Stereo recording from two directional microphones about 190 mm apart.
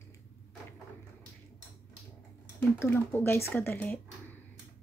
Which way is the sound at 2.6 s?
10° left (ahead or behind).